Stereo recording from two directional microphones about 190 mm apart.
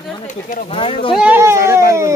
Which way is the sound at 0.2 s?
45° left (ahead or behind).